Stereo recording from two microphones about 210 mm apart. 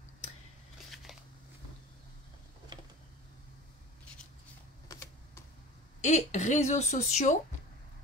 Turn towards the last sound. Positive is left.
turn(degrees=35)  # may be behind; listen again after turning